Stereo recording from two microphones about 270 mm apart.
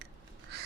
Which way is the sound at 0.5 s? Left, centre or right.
Right.